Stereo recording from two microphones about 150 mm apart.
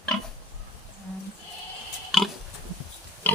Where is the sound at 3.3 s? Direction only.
10° left (ahead or behind).